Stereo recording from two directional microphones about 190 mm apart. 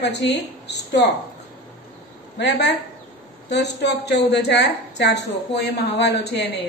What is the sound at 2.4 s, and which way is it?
A woman's voice, 65° left (ahead or behind).